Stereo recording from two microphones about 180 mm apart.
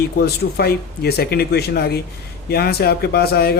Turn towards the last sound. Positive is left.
turn(degrees=60)  # may be behind; listen again after turning